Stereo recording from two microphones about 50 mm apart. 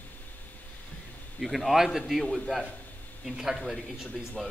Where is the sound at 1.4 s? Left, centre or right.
Centre.